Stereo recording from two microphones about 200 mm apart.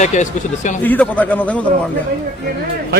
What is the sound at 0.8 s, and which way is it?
Speech, 10° left (ahead or behind).